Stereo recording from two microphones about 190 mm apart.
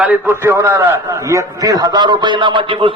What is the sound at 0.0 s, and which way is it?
A man's voice, 10° right (ahead or behind).